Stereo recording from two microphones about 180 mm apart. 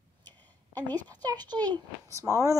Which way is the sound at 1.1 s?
25° right (ahead or behind).